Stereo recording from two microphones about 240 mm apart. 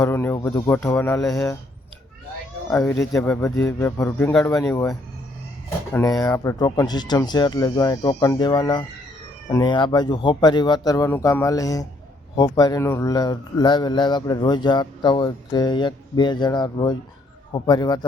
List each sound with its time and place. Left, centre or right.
0.0 s speech: centre
2.6 s speech: centre